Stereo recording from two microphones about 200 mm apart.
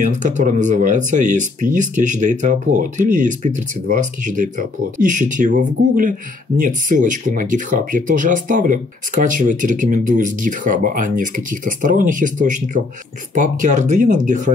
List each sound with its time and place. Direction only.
0.0 s speech: 40° right (ahead or behind)